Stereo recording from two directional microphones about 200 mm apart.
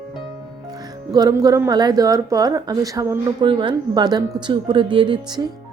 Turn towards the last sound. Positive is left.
turn(degrees=-20)  # may be behind; listen again after turning